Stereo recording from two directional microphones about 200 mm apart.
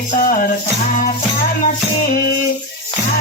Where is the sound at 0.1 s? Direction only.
40° left (ahead or behind).